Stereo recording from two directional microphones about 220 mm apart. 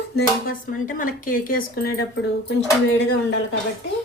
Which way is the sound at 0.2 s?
40° left (ahead or behind).